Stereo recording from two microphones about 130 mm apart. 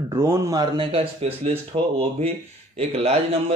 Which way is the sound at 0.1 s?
25° right (ahead or behind).